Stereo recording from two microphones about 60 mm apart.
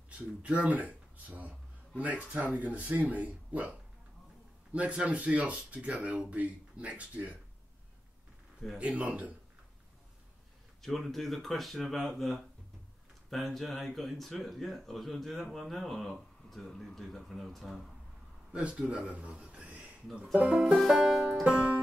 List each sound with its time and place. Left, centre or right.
0.4 s speech: right
4.7 s speech: right
8.7 s speech: right
10.8 s speech: centre
18.5 s a man's voice: right
20.7 s speech: centre
21.5 s music: right